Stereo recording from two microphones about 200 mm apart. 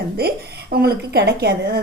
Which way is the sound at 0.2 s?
50° right (ahead or behind).